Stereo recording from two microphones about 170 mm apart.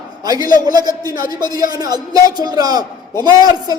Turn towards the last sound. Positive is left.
turn(degrees=-20)  # may be behind; listen again after turning